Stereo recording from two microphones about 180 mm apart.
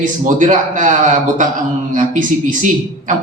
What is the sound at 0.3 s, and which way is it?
A man's voice, 45° right (ahead or behind).